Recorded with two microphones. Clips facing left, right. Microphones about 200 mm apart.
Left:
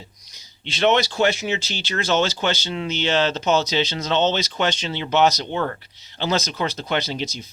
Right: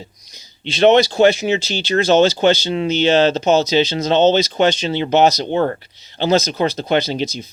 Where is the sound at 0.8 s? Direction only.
30° right (ahead or behind).